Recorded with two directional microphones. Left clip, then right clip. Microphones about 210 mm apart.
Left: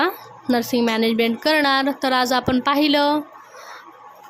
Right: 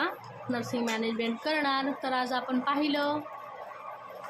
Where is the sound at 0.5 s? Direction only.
55° left (ahead or behind).